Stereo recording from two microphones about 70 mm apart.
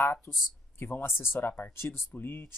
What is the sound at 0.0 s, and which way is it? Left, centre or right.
Speech, left.